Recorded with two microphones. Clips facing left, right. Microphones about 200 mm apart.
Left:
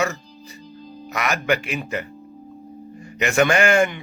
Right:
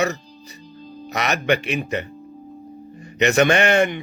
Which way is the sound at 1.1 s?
25° right (ahead or behind).